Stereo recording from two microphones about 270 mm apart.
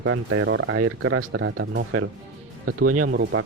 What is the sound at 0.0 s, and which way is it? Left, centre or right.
Speech, right.